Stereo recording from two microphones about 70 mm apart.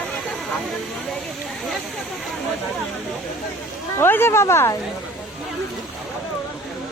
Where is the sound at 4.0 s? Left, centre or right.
Left.